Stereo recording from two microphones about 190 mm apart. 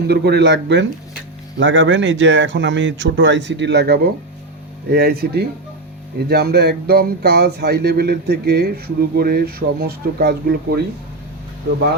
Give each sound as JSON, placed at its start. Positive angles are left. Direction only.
{"t": 0.1, "sound": "speech", "side_deg": -60}